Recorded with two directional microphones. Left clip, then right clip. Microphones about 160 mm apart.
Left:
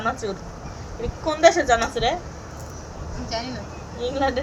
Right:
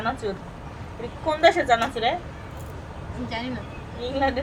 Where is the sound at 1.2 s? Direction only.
10° right (ahead or behind).